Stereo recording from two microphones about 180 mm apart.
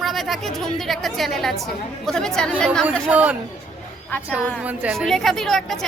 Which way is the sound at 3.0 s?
10° right (ahead or behind).